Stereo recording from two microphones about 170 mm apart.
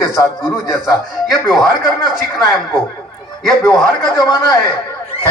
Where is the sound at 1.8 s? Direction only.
5° right (ahead or behind).